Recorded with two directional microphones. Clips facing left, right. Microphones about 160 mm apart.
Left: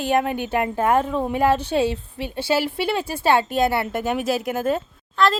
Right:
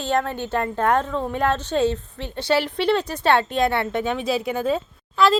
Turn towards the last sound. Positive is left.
turn(degrees=-5)  # may be behind; listen again after turning